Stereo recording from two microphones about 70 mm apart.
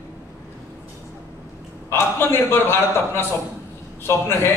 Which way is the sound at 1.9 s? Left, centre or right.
Left.